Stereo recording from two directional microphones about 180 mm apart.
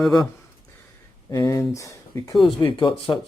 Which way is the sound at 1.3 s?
20° left (ahead or behind).